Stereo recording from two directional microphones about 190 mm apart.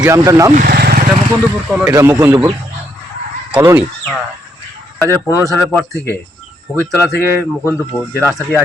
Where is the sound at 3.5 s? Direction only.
10° right (ahead or behind).